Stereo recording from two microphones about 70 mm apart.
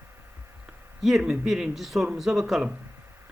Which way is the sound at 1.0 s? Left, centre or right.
Centre.